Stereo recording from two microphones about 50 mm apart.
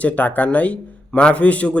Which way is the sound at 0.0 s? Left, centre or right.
Left.